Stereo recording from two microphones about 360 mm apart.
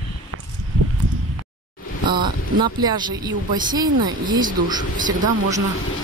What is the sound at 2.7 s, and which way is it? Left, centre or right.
Speech, centre.